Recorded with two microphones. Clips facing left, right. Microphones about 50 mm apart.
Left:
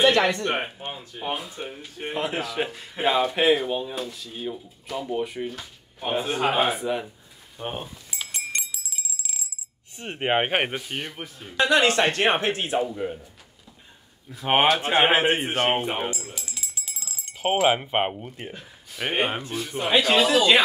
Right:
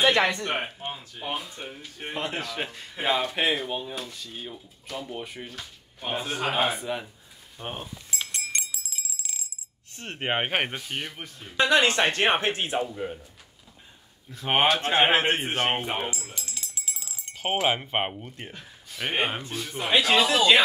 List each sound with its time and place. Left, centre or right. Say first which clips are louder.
0.1 s speech: left 2 dB; centre
0.9 s speech: left 3 dB; centre
8.2 s a sound: left 2 dB; centre
9.9 s speech: left 4 dB; centre
12.1 s speech: left 1 dB; centre
12.4 s speech: left 2 dB; right
12.7 s speech: left 3 dB; centre
14.3 s speech: left 3 dB; centre